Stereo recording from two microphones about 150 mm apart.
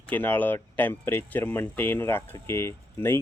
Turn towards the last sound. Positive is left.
turn(degrees=15)  # may be behind; listen again after turning